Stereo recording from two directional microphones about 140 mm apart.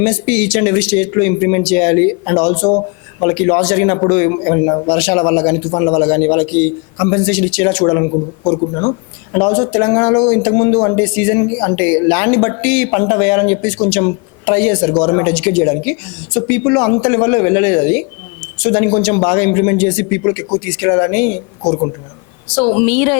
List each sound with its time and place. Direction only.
0.0 s a man's voice: 15° left (ahead or behind)
9.3 s a man's voice: 20° left (ahead or behind)
21.6 s speech: 25° left (ahead or behind)
22.5 s a man's voice: 15° left (ahead or behind)